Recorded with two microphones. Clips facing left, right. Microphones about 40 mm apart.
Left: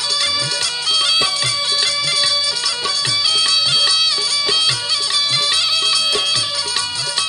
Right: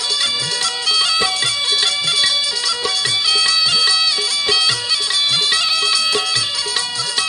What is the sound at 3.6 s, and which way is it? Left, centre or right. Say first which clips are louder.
Music: even; left.